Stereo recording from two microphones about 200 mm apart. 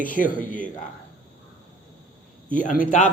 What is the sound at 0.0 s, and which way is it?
Speech, 45° left (ahead or behind).